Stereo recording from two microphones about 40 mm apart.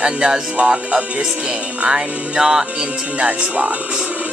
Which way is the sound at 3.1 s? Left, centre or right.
Right.